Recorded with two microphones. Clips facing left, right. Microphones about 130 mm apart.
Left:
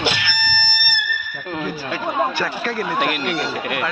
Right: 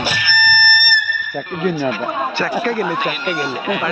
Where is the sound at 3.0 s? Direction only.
70° left (ahead or behind).